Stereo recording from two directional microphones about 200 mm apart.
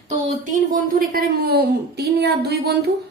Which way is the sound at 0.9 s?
50° right (ahead or behind).